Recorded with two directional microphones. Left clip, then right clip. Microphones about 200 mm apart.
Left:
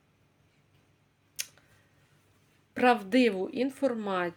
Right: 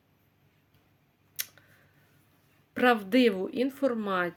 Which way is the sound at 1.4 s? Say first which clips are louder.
Even; 10° right (ahead or behind).